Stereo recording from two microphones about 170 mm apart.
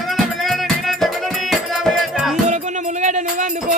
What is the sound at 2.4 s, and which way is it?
Music, 45° right (ahead or behind).